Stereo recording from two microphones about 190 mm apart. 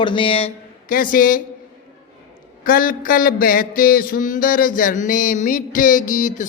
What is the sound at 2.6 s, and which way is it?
A man's voice, 50° left (ahead or behind).